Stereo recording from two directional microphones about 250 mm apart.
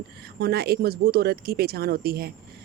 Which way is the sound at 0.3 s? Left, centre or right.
Right.